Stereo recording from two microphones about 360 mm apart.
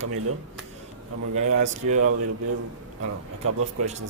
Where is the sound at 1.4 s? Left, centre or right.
Right.